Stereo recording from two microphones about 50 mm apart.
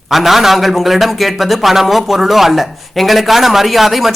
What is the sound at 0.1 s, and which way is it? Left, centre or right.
A man's voice, centre.